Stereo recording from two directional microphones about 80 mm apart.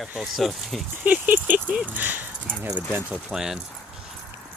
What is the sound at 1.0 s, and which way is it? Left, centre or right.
Speech, centre.